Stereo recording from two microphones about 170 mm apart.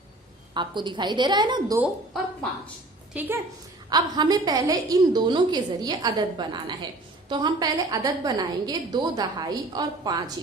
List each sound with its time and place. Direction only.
0.5 s a woman's voice: 25° right (ahead or behind)
3.2 s a woman's voice: 10° right (ahead or behind)
3.8 s a woman's voice: 25° right (ahead or behind)